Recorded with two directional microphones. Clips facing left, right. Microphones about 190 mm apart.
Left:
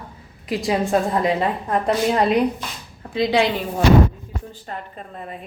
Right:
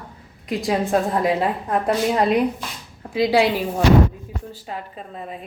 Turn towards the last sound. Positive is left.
turn(degrees=-5)  # may be behind; listen again after turning